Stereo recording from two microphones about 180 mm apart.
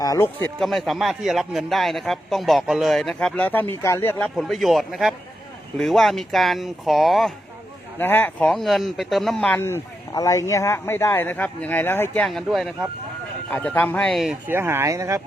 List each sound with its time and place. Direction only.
0.0 s speech: 15° left (ahead or behind)
0.6 s a man's voice: centre (ahead or behind)
4.4 s a man's voice: centre (ahead or behind)
7.9 s speech: 10° left (ahead or behind)
14.4 s speech: 15° right (ahead or behind)